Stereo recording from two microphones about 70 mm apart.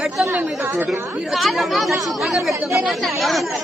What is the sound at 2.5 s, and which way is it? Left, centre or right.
Speech, right.